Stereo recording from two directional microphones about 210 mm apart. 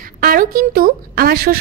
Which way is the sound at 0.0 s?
45° right (ahead or behind).